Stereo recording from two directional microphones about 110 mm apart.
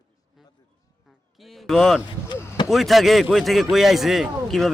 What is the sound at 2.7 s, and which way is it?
Speech, centre (ahead or behind).